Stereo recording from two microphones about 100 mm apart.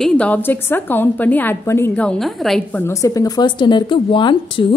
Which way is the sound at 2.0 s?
5° left (ahead or behind).